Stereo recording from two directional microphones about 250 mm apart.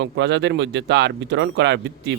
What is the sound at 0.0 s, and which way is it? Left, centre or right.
Speech, right.